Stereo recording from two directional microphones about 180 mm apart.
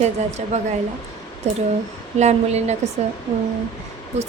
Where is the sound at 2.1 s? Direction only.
40° right (ahead or behind).